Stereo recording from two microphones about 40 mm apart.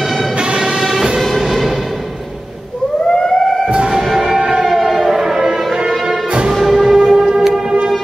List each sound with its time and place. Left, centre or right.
0.6 s music: centre
3.1 s siren: centre
3.7 s music: right
4.1 s a sound: centre
4.5 s choir: centre
4.7 s music: centre